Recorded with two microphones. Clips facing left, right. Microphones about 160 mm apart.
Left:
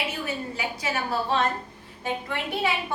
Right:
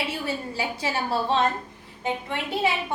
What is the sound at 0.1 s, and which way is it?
A woman's voice, 30° right (ahead or behind).